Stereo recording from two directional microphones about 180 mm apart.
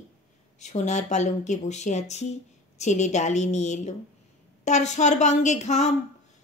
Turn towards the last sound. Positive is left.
turn(degrees=40)  # may be behind; listen again after turning